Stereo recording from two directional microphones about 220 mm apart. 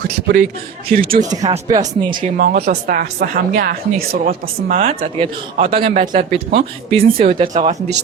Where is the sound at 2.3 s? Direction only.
45° right (ahead or behind).